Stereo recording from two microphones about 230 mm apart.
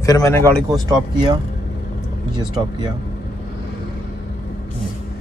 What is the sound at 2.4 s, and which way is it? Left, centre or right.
Speech, centre.